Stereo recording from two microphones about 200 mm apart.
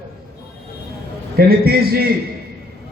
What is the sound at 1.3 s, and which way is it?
Speech, 50° right (ahead or behind).